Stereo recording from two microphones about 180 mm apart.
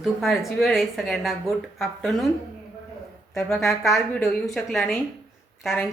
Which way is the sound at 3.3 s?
Centre (ahead or behind).